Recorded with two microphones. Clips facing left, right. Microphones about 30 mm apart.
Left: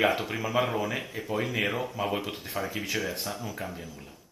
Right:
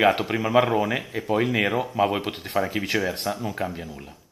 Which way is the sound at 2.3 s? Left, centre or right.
Right.